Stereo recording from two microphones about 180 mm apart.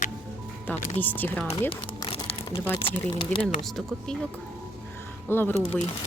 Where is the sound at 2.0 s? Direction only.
20° left (ahead or behind).